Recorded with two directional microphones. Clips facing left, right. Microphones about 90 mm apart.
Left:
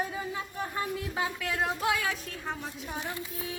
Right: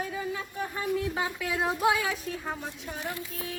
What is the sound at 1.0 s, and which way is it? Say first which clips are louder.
Speech: right 2 dB; 5° right (ahead or behind).